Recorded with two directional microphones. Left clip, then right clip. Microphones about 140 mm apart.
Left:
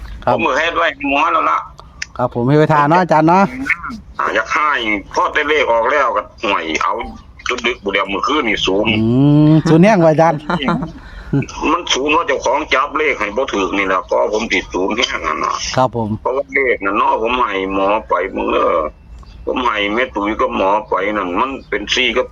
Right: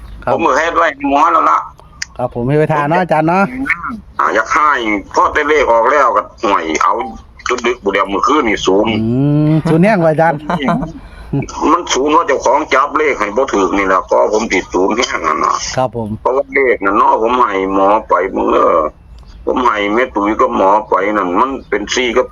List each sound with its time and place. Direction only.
0.3 s speech: 30° right (ahead or behind)
2.4 s speech: 15° left (ahead or behind)
3.7 s speech: 25° right (ahead or behind)
9.0 s speech: 20° left (ahead or behind)
10.4 s speech: 35° right (ahead or behind)
15.7 s speech: 30° left (ahead or behind)
16.2 s speech: 30° right (ahead or behind)